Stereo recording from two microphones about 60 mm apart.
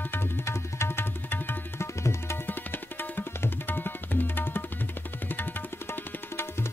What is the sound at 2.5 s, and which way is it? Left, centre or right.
Tabla, left.